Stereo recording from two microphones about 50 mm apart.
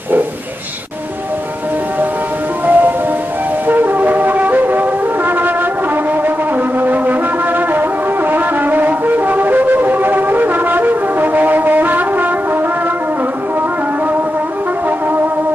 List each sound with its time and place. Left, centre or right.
2.6 s music: right
3.6 s brass instrument: right
6.2 s music: right